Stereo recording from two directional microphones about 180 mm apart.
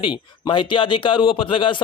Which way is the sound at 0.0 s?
25° left (ahead or behind).